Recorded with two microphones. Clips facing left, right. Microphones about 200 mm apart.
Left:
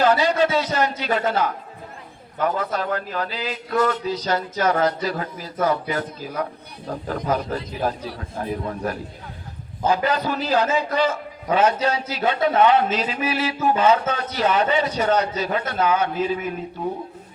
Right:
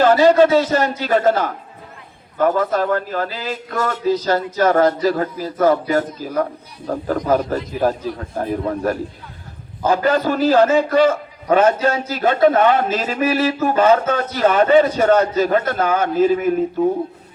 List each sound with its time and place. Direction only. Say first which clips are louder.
0.0 s a man's voice: right 7 dB; 45° right (ahead or behind)